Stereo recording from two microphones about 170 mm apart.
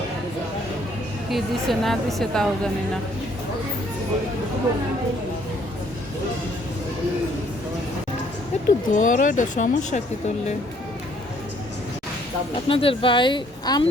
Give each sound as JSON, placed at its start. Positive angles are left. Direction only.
{"t": 1.3, "sound": "a woman's voice", "side_deg": 0}
{"t": 8.5, "sound": "speech", "side_deg": 40}
{"t": 12.6, "sound": "speech", "side_deg": 30}